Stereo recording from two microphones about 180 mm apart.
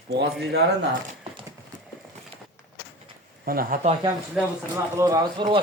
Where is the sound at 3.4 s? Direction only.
55° right (ahead or behind).